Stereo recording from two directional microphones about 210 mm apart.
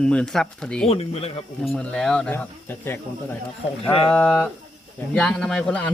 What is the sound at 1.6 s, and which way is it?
Speech, 5° left (ahead or behind).